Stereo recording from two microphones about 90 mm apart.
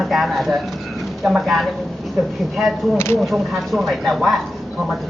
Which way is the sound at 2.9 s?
25° left (ahead or behind).